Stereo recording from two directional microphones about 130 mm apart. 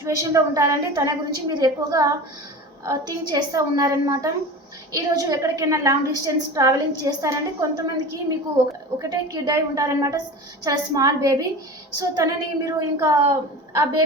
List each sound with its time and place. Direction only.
0.0 s a woman's voice: 25° right (ahead or behind)
9.0 s a woman's voice: 25° right (ahead or behind)